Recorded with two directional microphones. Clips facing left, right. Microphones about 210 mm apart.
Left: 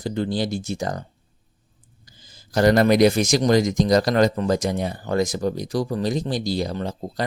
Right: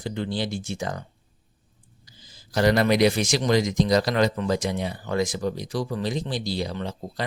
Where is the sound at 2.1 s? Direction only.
50° left (ahead or behind).